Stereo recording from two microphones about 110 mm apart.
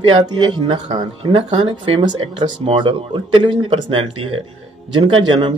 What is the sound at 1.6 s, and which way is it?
Speech, 45° right (ahead or behind).